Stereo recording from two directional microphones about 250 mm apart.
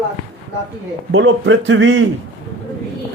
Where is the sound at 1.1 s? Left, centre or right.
Right.